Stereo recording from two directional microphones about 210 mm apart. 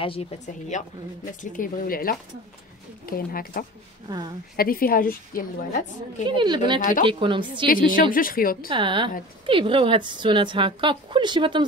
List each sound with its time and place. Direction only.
0.0 s a woman's voice: 25° left (ahead or behind)
6.2 s a woman's voice: 20° right (ahead or behind)
7.6 s a woman's voice: 40° left (ahead or behind)
8.6 s a woman's voice: 25° right (ahead or behind)